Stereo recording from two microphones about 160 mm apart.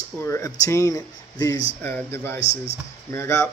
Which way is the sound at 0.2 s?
15° left (ahead or behind).